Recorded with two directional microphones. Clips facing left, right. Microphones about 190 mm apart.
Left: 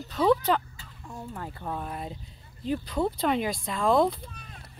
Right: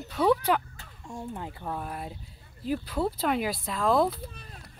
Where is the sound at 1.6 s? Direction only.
5° right (ahead or behind).